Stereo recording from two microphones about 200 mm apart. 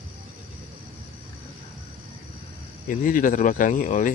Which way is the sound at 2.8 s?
40° left (ahead or behind).